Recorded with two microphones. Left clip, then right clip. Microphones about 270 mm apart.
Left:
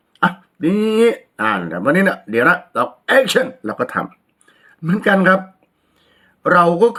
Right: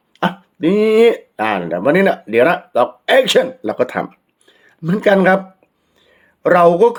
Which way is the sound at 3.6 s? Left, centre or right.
Centre.